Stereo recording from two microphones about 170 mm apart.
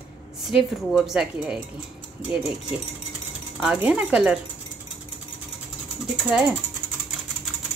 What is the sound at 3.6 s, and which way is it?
Speech, 5° right (ahead or behind).